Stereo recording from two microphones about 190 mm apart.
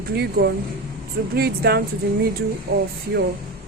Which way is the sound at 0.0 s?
55° right (ahead or behind).